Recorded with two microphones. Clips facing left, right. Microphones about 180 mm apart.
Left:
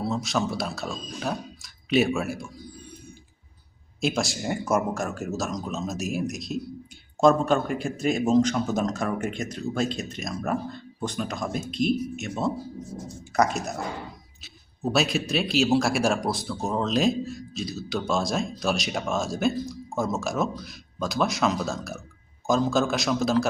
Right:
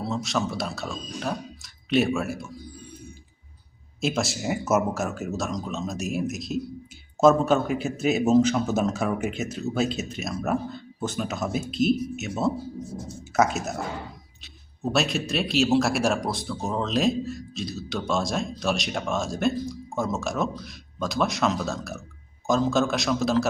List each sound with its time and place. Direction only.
0.0 s speech: centre (ahead or behind)
4.0 s speech: centre (ahead or behind)
14.9 s speech: centre (ahead or behind)